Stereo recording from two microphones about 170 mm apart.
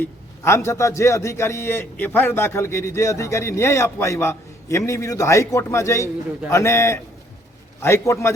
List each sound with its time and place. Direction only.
0.0 s a man's voice: 15° left (ahead or behind)